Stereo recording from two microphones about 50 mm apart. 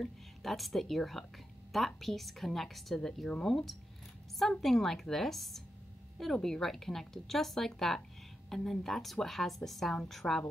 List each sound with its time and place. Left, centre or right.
0.0 s a woman's voice: centre